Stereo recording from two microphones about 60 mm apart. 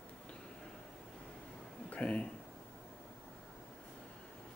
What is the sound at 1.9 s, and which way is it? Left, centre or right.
Speech, centre.